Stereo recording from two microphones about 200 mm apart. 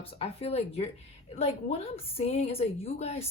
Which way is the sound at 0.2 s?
30° left (ahead or behind).